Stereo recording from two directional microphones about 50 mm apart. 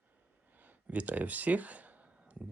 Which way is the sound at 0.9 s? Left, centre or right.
Right.